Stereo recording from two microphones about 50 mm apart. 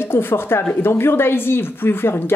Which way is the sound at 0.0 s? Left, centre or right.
Left.